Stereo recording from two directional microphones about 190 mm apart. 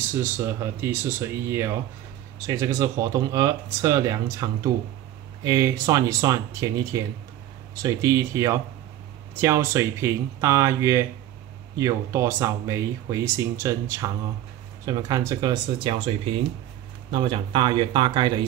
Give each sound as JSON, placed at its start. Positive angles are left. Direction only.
{"t": 0.2, "sound": "speech", "side_deg": -15}